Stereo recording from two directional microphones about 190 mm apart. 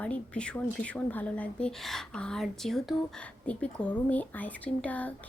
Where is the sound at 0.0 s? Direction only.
5° left (ahead or behind).